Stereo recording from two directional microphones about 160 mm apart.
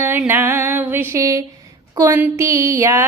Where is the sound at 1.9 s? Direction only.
20° right (ahead or behind).